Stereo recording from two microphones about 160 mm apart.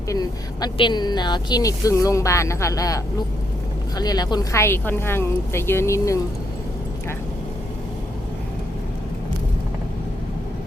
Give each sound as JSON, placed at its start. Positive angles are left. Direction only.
{"t": 0.1, "sound": "speech", "side_deg": 25}